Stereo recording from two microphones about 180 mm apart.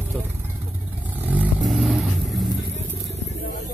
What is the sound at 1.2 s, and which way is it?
Vehicle, 10° right (ahead or behind).